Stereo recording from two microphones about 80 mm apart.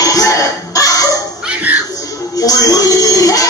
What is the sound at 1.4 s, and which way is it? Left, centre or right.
Dog, centre.